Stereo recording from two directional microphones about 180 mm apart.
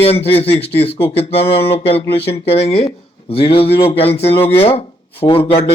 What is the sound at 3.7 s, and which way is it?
Speech, 30° left (ahead or behind).